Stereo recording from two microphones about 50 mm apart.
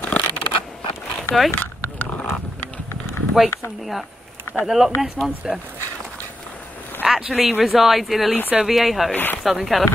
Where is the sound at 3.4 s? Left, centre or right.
Centre.